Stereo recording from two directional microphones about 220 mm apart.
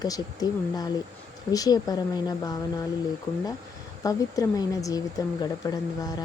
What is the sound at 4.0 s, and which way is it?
Speech, 15° left (ahead or behind).